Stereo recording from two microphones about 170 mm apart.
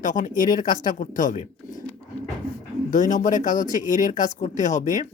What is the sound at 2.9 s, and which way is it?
Speech, 50° left (ahead or behind).